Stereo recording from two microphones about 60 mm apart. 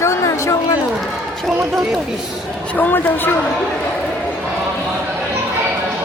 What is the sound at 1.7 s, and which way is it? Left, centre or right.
Speech, centre.